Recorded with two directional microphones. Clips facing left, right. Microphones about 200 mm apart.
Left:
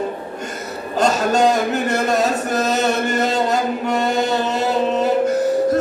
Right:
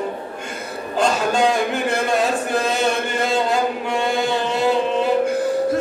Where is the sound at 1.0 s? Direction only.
40° left (ahead or behind).